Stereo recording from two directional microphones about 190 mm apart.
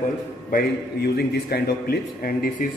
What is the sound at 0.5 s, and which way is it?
A man's voice, 50° left (ahead or behind).